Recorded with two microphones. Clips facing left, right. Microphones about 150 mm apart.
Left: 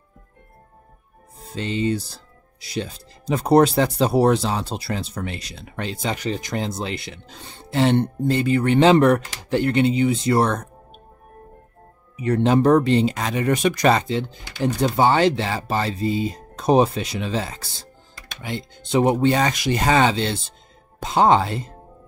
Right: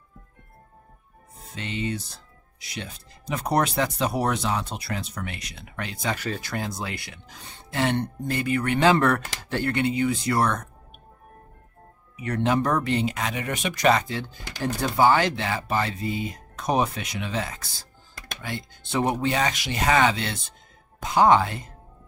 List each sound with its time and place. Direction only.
1.5 s speech: 35° left (ahead or behind)
12.2 s speech: 30° left (ahead or behind)
14.0 s speech: 20° left (ahead or behind)
18.4 s speech: 20° left (ahead or behind)
19.1 s speech: 35° left (ahead or behind)